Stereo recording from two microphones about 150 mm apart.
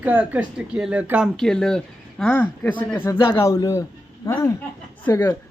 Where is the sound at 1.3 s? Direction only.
5° left (ahead or behind).